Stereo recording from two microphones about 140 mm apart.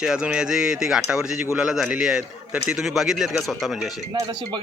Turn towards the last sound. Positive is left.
turn(degrees=-35)  # may be behind; listen again after turning